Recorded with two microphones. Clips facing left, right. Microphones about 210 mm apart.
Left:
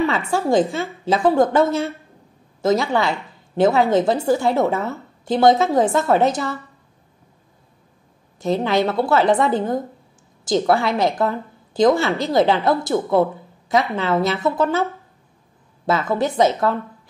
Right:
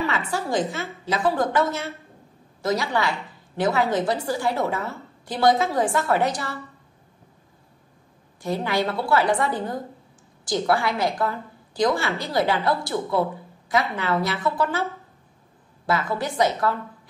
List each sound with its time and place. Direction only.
0.1 s a woman's voice: 30° left (ahead or behind)
8.4 s a woman's voice: 20° left (ahead or behind)
16.2 s a woman's voice: 25° left (ahead or behind)